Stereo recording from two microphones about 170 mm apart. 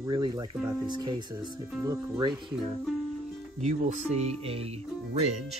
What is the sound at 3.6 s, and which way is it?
Speech, 40° right (ahead or behind).